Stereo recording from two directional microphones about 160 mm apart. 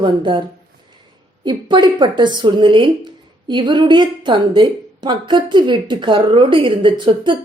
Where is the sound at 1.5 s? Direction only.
30° right (ahead or behind).